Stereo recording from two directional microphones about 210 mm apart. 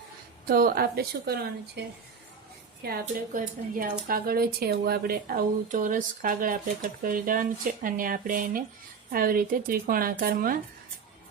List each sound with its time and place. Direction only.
0.4 s speech: 45° right (ahead or behind)
2.8 s speech: 45° right (ahead or behind)